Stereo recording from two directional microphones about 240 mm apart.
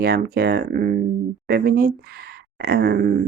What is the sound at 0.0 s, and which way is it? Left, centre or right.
Speech, right.